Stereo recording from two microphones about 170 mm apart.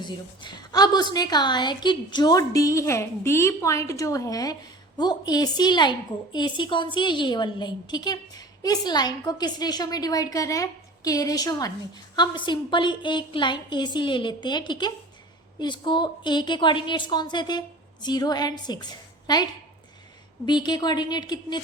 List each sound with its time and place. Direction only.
0.0 s a woman's voice: 25° left (ahead or behind)